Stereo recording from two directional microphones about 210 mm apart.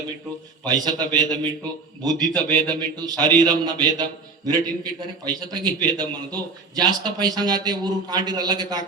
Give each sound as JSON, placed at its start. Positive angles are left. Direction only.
{"t": 0.6, "sound": "a man's voice", "side_deg": -20}